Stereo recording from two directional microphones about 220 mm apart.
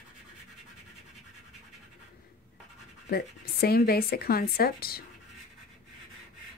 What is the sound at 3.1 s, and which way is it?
Speech, 45° left (ahead or behind).